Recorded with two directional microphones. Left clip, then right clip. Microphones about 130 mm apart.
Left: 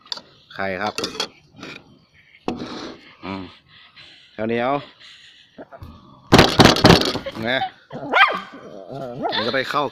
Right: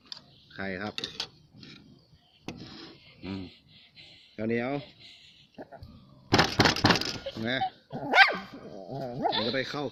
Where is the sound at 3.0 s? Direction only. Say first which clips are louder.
Left 9 dB; 30° right (ahead or behind).